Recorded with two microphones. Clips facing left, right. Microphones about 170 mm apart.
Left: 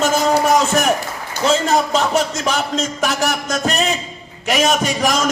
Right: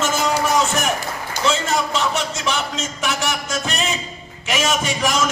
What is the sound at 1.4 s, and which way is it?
Speech, 40° left (ahead or behind).